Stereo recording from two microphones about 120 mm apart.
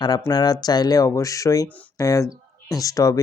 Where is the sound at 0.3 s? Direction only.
35° left (ahead or behind).